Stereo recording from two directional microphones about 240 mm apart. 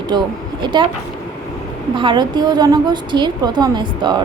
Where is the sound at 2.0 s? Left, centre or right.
Centre.